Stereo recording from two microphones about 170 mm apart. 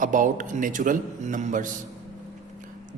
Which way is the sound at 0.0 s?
50° right (ahead or behind).